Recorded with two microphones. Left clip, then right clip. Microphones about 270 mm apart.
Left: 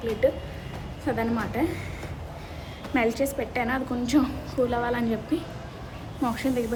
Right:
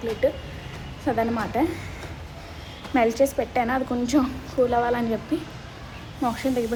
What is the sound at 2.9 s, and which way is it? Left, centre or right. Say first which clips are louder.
A woman's voice: right 5 dB; centre.